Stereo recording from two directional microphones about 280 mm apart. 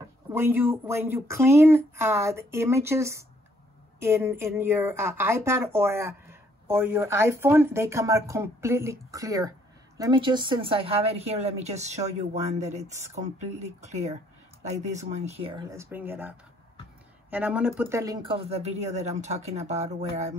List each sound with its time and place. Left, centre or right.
0.3 s speech: centre; by 12.9 s right
14.7 s speech: right